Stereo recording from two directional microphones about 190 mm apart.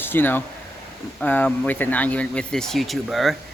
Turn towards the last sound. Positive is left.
turn(degrees=0)  # may be behind; listen again after turning